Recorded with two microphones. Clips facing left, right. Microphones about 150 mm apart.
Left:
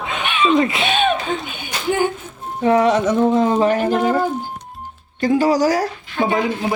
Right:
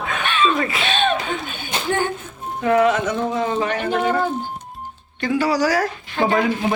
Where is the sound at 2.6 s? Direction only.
35° left (ahead or behind).